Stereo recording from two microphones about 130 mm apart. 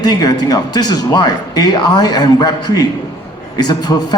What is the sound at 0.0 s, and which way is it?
Speech, 30° left (ahead or behind).